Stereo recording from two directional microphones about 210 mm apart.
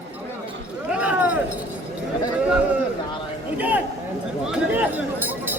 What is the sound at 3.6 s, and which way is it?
Speech, 5° right (ahead or behind).